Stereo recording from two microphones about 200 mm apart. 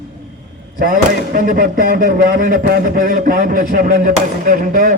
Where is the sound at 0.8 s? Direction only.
45° right (ahead or behind).